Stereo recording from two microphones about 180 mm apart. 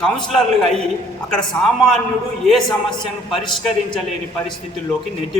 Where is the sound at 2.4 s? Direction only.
Centre (ahead or behind).